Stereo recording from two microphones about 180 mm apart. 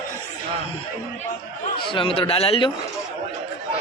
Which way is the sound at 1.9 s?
30° left (ahead or behind).